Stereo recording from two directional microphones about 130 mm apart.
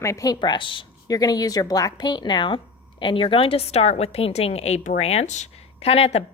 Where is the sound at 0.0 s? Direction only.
25° left (ahead or behind).